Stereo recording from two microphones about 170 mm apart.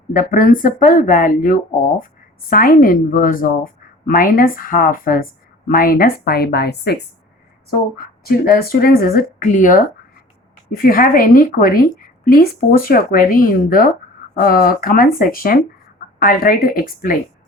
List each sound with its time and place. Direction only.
0.1 s a woman's voice: 50° left (ahead or behind)